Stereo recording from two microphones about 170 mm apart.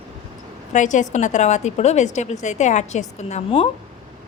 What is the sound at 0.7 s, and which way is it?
A woman's voice, 45° left (ahead or behind).